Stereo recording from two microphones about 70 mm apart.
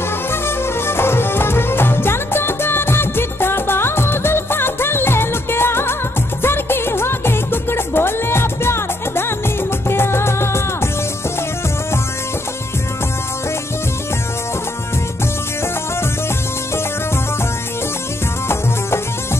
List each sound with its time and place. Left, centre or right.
0.3 s music: left